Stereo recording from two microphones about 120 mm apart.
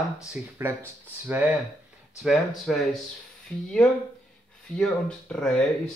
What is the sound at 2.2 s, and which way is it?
Speech, centre (ahead or behind).